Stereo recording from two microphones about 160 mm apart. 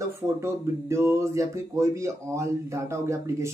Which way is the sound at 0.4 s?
15° right (ahead or behind).